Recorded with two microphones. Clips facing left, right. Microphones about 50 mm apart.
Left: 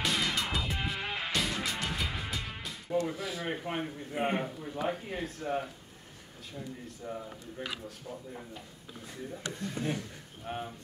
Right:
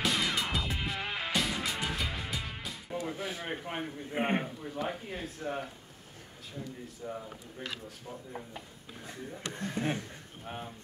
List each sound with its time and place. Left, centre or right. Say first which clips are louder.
0.0 s music: even; centre
3.2 s speech: left 1 dB; right
3.6 s speech: left 2 dB; centre
4.1 s a man's voice: right 1 dB; right
4.4 s speech: left 1 dB; centre
8.5 s speech: right 1 dB; right
10.4 s speech: left 4 dB; centre